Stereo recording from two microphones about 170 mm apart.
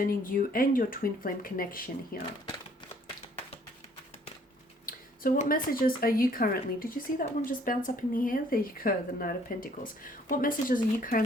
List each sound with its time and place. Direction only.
0.0 s speech: 55° left (ahead or behind)
4.9 s speech: 55° left (ahead or behind)